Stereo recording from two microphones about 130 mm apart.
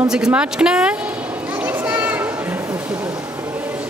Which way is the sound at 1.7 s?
10° right (ahead or behind).